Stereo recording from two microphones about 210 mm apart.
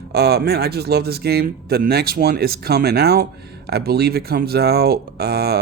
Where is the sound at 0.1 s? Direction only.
50° right (ahead or behind).